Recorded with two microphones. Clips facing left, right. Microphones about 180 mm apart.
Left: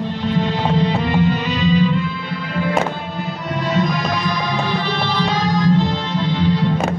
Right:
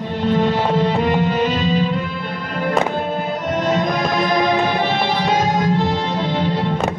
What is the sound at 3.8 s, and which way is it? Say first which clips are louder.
Music: right 2 dB; 50° right (ahead or behind).